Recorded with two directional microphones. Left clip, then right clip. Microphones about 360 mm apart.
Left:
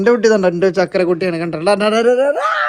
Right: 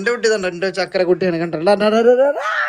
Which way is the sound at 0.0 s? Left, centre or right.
Centre.